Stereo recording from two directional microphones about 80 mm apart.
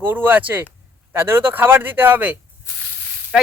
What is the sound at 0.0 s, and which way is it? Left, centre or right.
Speech, right.